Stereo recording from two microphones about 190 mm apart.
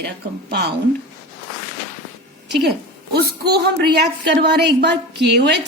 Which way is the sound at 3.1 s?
55° right (ahead or behind).